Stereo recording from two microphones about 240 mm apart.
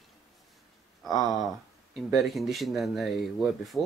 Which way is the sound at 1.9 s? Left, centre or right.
Centre.